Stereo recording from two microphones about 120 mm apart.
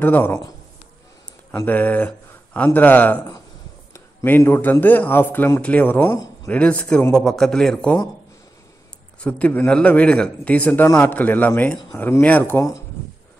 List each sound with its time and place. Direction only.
0.0 s speech: 15° left (ahead or behind)
1.6 s a man's voice: 15° left (ahead or behind)
9.2 s speech: 15° left (ahead or behind)